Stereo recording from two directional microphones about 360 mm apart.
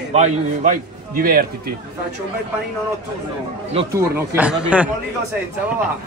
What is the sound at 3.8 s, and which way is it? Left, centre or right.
Speech, centre.